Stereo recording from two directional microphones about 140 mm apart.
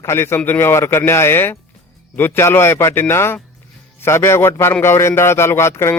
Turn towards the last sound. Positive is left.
turn(degrees=20)  # may be behind; listen again after turning